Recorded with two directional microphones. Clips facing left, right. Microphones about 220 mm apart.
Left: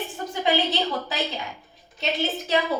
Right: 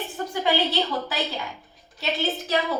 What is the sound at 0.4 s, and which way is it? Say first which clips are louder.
Speech: left 1 dB; 20° left (ahead or behind).